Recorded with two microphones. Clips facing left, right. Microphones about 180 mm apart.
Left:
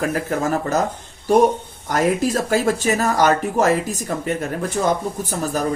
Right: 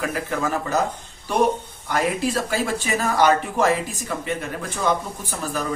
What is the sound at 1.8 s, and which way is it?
Speech, 45° left (ahead or behind).